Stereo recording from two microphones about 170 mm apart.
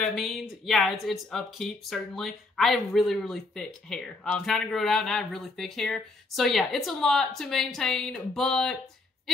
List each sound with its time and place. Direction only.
0.0 s speech: centre (ahead or behind)